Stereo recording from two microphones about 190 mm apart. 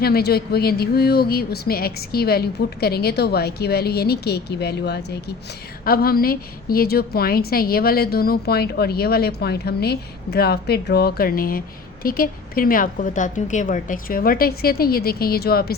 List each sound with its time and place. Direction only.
0.0 s a woman's voice: 55° left (ahead or behind)